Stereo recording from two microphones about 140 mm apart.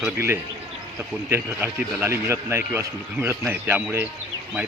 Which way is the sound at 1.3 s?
15° right (ahead or behind).